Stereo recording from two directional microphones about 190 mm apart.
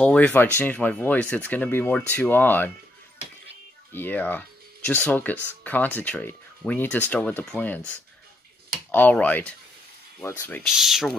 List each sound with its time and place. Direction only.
0.0 s speech: 5° left (ahead or behind)
3.9 s speech: 10° left (ahead or behind)
8.9 s speech: 10° left (ahead or behind)
10.6 s speech: centre (ahead or behind)